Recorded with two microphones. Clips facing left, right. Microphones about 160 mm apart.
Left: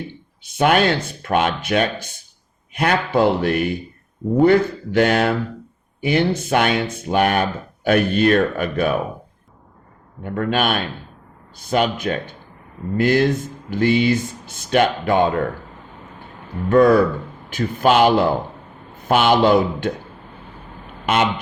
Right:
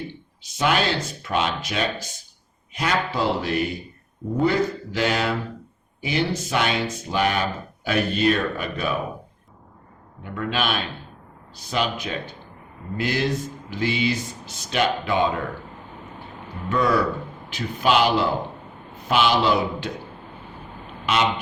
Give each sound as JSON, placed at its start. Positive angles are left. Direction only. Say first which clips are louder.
{"t": 0.4, "sound": "speech", "louder": "left 6 dB", "side_deg": 55}
{"t": 10.2, "sound": "speech", "louder": "left 5 dB", "side_deg": 50}
{"t": 16.6, "sound": "speech", "louder": "left 8 dB", "side_deg": 50}
{"t": 21.1, "sound": "speech", "louder": "left 4 dB", "side_deg": 50}